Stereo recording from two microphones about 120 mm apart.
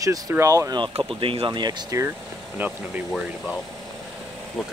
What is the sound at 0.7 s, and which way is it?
Speech, 50° right (ahead or behind).